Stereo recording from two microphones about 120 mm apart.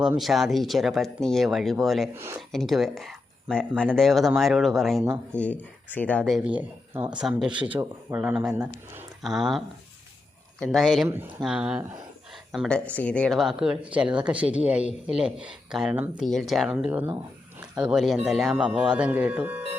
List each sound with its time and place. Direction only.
0.2 s speech: centre (ahead or behind)
2.1 s speech: 20° right (ahead or behind)
2.5 s speech: centre (ahead or behind)
5.0 s speech: 20° right (ahead or behind)
5.4 s speech: 10° left (ahead or behind)
6.3 s speech: 10° right (ahead or behind)
7.7 s speech: 15° right (ahead or behind)
12.3 s a sound: centre (ahead or behind)
13.0 s speech: 10° left (ahead or behind)
13.4 s speech: 5° right (ahead or behind)
16.7 s speech: 15° right (ahead or behind)